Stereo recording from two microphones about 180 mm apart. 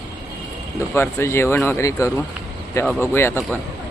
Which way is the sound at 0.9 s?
15° left (ahead or behind).